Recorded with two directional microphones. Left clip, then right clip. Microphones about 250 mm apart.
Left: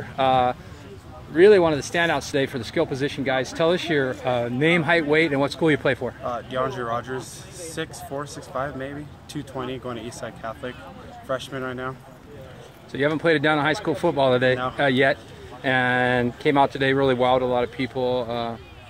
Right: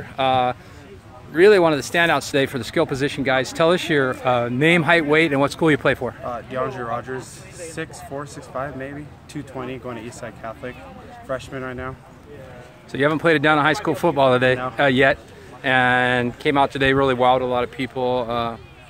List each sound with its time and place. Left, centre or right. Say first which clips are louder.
0.0 s speech: right 1 dB; centre
6.2 s speech: left 3 dB; centre
12.9 s speech: right 3 dB; centre